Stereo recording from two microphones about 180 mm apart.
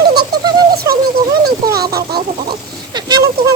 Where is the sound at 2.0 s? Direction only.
60° right (ahead or behind).